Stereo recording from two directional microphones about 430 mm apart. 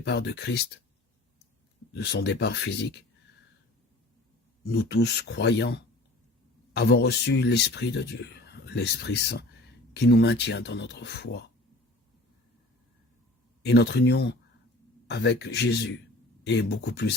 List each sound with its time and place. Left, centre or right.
0.0 s speech: left
1.9 s speech: left
4.6 s speech: left
13.6 s speech: left